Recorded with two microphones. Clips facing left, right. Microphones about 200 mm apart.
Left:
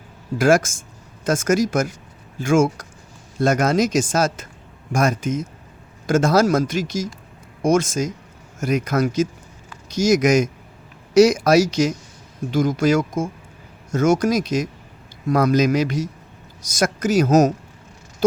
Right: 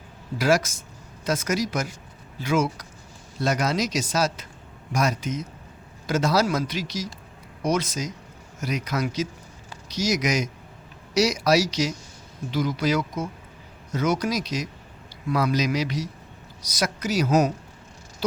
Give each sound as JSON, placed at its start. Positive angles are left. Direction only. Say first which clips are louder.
{"t": 0.3, "sound": "speech", "louder": "left 5 dB", "side_deg": 50}